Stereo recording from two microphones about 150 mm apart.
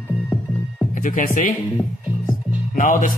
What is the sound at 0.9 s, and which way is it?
Speech, 60° left (ahead or behind).